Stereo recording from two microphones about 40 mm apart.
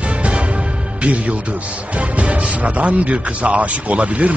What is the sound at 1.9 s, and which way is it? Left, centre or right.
Speech, right.